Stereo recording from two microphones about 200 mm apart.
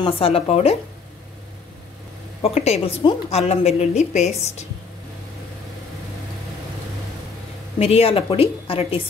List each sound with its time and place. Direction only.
0.0 s speech: 30° left (ahead or behind)
2.4 s speech: 30° left (ahead or behind)
7.8 s speech: 30° left (ahead or behind)